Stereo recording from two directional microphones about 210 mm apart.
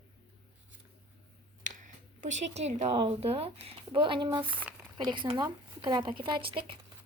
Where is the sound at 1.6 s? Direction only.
35° right (ahead or behind).